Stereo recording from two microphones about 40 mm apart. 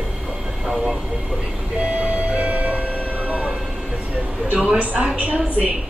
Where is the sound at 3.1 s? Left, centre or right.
Right.